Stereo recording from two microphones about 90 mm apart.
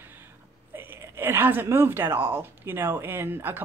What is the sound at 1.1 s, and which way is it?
Speech, 25° right (ahead or behind).